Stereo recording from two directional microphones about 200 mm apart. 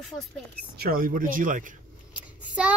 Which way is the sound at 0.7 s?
50° right (ahead or behind).